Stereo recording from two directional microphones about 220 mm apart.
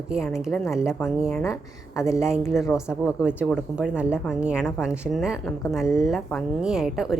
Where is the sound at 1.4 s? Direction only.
15° left (ahead or behind).